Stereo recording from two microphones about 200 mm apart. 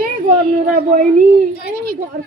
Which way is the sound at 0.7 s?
40° right (ahead or behind).